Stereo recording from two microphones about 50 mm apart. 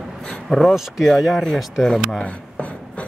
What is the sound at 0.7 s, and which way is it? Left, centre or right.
Speech, centre.